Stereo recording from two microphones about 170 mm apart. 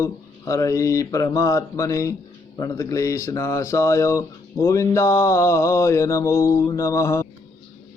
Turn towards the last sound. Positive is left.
turn(degrees=15)  # may be behind; listen again after turning